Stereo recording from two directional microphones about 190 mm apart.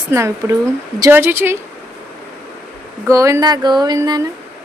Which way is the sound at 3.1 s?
15° right (ahead or behind).